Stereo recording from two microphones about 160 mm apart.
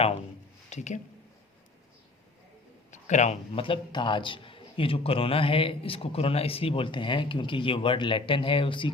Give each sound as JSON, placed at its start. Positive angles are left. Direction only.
{"t": 0.7, "sound": "speech", "side_deg": 45}
{"t": 2.9, "sound": "a man's voice", "side_deg": 45}